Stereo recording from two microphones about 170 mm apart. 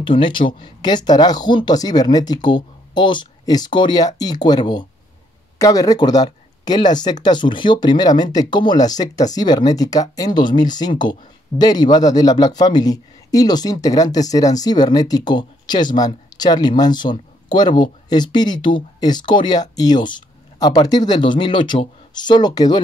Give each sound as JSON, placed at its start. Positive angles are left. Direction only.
{"t": 0.0, "sound": "speech", "side_deg": 30}